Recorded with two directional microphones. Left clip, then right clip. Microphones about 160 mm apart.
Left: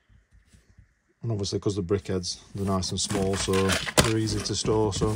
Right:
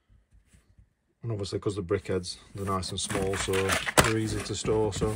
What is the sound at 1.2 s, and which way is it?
Speech, 15° left (ahead or behind).